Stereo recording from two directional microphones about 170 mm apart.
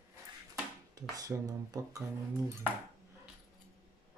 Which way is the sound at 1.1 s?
20° right (ahead or behind).